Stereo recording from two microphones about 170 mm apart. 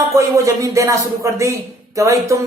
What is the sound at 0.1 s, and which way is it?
A man's voice, 20° right (ahead or behind).